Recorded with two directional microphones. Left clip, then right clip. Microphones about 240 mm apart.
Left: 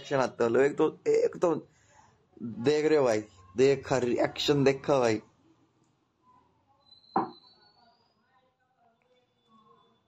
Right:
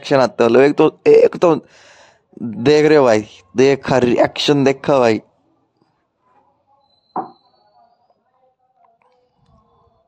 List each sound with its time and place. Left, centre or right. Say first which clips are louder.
0.1 s speech: right 14 dB; right